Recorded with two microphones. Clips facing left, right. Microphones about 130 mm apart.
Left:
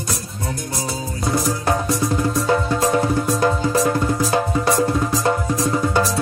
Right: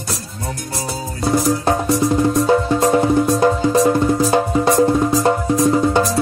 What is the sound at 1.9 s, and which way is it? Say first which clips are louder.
Music: right 5 dB; 20° right (ahead or behind).